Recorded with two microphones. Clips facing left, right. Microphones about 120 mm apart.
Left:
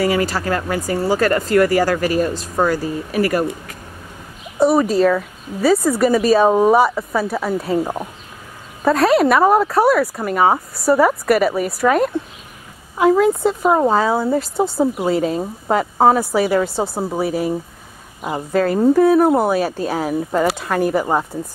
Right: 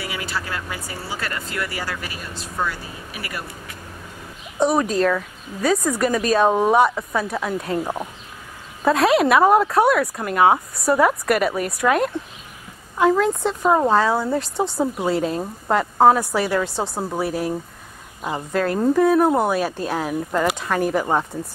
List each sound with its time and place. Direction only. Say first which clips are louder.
0.0 s speech: left 11 dB; 40° left (ahead or behind)
4.6 s speech: left 4 dB; 5° left (ahead or behind)